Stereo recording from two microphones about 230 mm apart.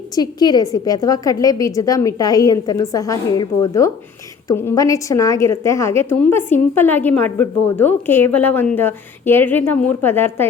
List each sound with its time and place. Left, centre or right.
0.2 s a woman's voice: centre